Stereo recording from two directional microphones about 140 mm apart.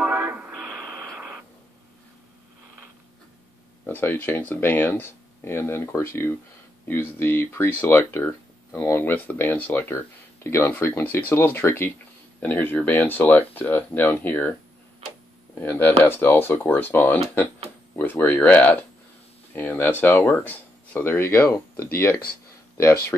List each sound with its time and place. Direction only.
0.0 s a sound: 10° right (ahead or behind)
0.9 s radio: 15° right (ahead or behind)
3.8 s speech: 15° left (ahead or behind)
15.5 s speech: 15° left (ahead or behind)